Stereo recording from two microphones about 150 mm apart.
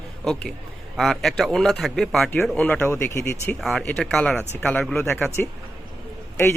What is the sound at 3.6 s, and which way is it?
A man's voice, centre (ahead or behind).